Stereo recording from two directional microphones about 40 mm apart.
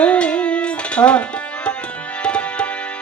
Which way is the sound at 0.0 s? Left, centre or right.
Left.